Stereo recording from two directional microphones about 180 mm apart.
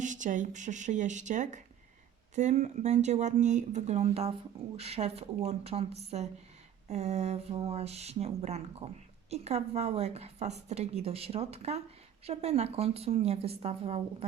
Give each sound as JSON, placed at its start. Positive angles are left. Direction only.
{"t": 0.0, "sound": "a woman's voice", "side_deg": -45}